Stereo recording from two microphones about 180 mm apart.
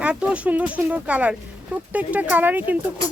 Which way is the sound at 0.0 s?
5° right (ahead or behind).